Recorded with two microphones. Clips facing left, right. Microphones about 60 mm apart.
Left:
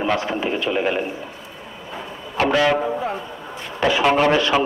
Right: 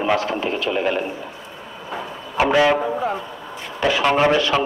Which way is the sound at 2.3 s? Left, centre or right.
Centre.